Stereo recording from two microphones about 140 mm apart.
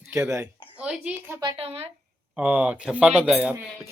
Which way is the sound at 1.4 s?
40° right (ahead or behind).